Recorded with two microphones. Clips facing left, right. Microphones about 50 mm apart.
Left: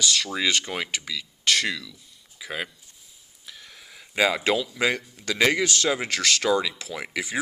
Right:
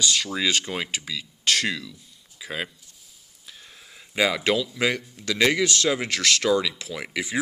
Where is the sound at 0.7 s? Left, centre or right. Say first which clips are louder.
Even; centre.